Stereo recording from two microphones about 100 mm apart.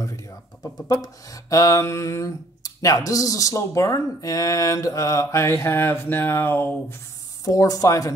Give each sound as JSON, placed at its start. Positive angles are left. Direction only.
{"t": 0.0, "sound": "speech", "side_deg": 35}
{"t": 7.4, "sound": "speech", "side_deg": 35}